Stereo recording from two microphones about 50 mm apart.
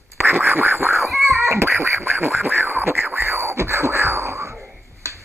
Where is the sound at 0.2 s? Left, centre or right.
Right.